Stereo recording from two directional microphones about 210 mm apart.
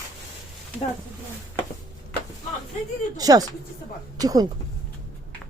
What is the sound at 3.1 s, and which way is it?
Speech, 15° right (ahead or behind).